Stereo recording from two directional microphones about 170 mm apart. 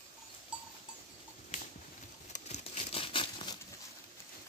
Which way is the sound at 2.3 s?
45° left (ahead or behind).